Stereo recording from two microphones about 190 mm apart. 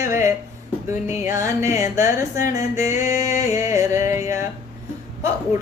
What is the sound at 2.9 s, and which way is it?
Music, 15° right (ahead or behind).